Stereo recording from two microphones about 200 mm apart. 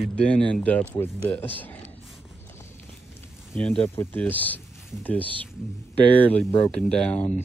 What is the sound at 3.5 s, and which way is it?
Speech, 5° left (ahead or behind).